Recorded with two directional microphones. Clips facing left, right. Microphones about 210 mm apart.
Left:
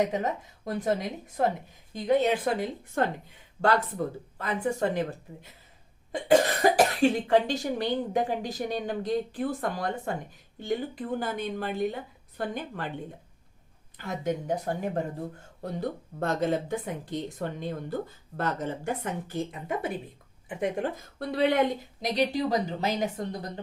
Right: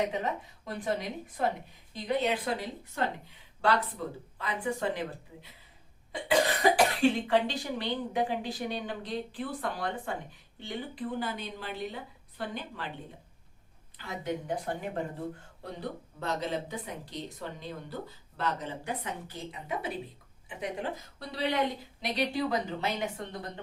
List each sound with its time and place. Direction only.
0.1 s speech: 45° left (ahead or behind)
14.0 s speech: 45° left (ahead or behind)
22.0 s a woman's voice: 40° left (ahead or behind)